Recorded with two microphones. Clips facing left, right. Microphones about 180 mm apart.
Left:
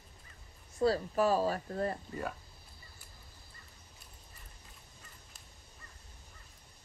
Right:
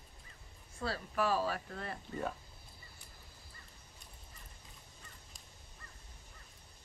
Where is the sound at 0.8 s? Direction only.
40° left (ahead or behind).